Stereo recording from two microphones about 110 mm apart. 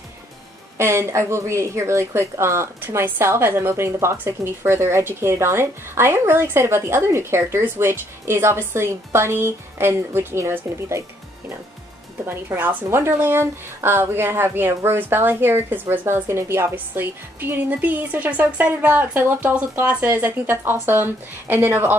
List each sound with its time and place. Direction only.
0.7 s a woman's voice: 25° right (ahead or behind)